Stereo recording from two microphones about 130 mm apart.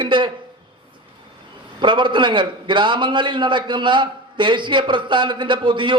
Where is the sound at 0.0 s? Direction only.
40° right (ahead or behind).